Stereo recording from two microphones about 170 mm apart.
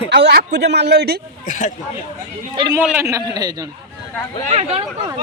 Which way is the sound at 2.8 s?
10° right (ahead or behind).